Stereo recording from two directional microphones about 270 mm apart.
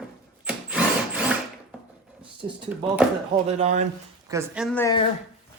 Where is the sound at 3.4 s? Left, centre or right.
Right.